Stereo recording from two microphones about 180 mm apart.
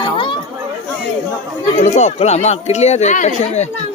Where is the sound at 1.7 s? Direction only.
40° left (ahead or behind).